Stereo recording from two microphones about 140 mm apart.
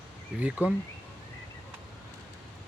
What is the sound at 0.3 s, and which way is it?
Speech, 10° right (ahead or behind).